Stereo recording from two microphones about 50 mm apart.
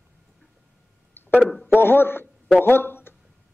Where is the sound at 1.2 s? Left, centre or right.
Left.